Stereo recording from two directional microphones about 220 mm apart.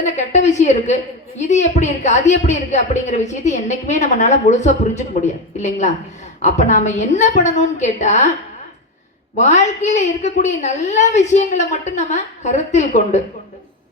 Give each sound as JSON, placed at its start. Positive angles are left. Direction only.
{"t": 0.0, "sound": "a woman's voice", "side_deg": 35}
{"t": 9.3, "sound": "a woman's voice", "side_deg": 30}